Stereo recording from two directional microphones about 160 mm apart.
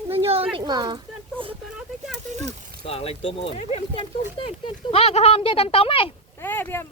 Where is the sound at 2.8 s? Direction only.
40° left (ahead or behind).